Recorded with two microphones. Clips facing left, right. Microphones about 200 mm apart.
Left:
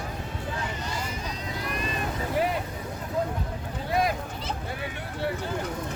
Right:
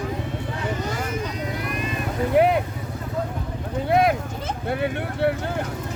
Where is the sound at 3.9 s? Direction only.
60° right (ahead or behind).